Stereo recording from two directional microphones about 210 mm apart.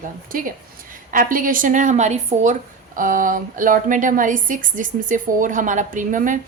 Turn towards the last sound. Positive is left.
turn(degrees=-40)  # may be behind; listen again after turning